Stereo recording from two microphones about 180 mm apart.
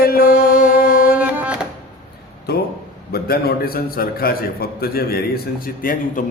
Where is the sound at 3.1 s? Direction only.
55° left (ahead or behind).